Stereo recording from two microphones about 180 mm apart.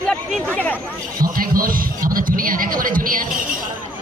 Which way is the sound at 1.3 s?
50° right (ahead or behind).